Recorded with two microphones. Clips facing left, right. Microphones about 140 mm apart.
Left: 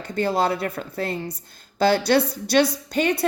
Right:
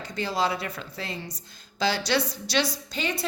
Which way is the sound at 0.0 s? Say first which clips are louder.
Left 5 dB; 55° left (ahead or behind).